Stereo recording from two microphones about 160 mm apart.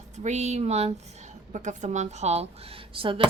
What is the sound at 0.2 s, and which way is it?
A woman's voice, 45° right (ahead or behind).